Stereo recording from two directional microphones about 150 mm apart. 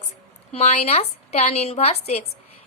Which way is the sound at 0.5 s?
45° left (ahead or behind).